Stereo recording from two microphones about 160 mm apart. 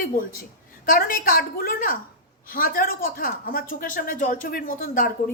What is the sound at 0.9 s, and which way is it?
Speech, 60° left (ahead or behind).